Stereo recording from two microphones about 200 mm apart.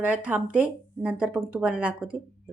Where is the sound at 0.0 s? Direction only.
5° right (ahead or behind).